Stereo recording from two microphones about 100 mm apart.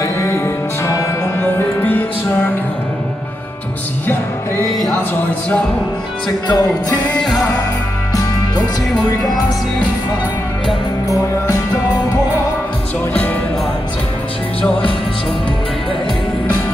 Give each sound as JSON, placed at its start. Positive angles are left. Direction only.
{"t": 0.0, "sound": "music", "side_deg": 25}
{"t": 6.4, "sound": "music", "side_deg": 40}
{"t": 7.2, "sound": "music", "side_deg": 5}